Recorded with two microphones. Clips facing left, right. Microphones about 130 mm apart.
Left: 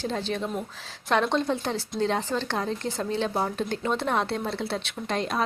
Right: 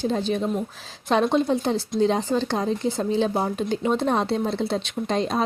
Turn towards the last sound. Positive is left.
turn(degrees=-25)  # may be behind; listen again after turning